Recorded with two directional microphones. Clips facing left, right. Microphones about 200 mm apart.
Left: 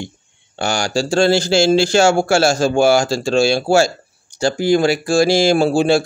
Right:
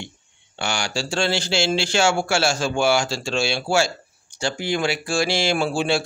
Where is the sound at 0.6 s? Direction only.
40° left (ahead or behind).